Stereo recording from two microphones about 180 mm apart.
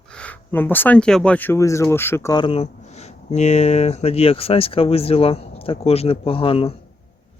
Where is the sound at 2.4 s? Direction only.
30° left (ahead or behind).